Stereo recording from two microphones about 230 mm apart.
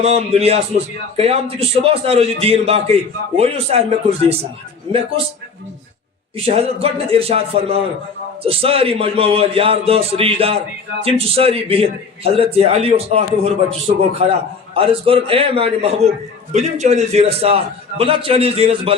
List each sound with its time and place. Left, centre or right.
0.0 s a man's voice: right
6.3 s a man's voice: right
14.8 s a man's voice: right